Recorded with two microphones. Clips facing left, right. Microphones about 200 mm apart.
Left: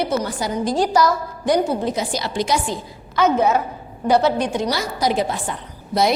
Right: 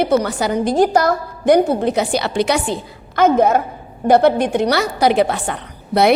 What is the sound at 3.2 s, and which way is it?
A woman's voice, 55° right (ahead or behind).